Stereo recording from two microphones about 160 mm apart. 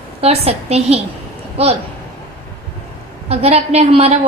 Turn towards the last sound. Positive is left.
turn(degrees=-40)  # may be behind; listen again after turning